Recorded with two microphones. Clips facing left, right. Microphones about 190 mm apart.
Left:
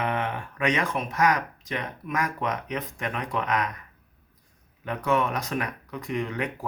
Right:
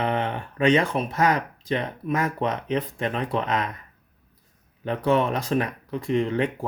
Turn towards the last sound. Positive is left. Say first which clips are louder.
# right 6 dB
turn(degrees=-30)  # may be behind; listen again after turning